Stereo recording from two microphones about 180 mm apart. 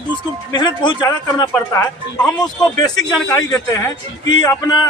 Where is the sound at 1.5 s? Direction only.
5° left (ahead or behind).